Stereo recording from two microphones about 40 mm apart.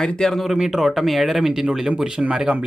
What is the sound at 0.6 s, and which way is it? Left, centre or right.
Speech, centre.